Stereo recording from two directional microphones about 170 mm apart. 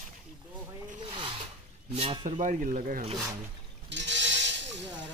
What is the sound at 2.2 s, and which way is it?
Speech, 45° right (ahead or behind).